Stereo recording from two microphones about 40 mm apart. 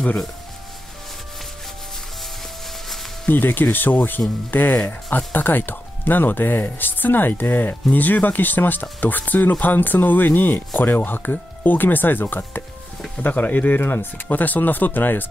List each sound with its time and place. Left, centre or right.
3.3 s speech: left
13.7 s speech: left
14.3 s speech: left